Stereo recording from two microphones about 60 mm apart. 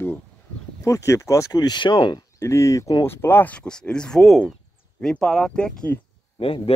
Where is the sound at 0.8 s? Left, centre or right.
Left.